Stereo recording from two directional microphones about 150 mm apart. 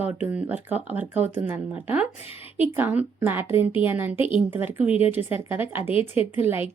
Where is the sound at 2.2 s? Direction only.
40° left (ahead or behind).